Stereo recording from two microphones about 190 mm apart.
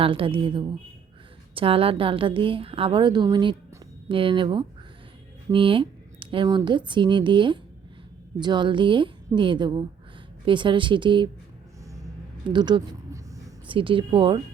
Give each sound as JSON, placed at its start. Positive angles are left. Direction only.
{"t": 0.0, "sound": "speech", "side_deg": -25}
{"t": 12.5, "sound": "a sound", "side_deg": -25}
{"t": 13.7, "sound": "speech", "side_deg": -25}